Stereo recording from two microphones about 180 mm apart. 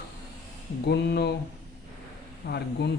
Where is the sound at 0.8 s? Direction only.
65° left (ahead or behind).